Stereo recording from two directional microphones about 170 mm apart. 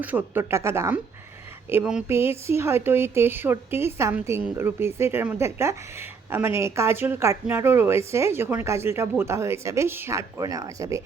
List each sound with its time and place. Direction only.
0.0 s speech: 10° right (ahead or behind)
1.7 s speech: 5° right (ahead or behind)
2.0 s speech: 15° right (ahead or behind)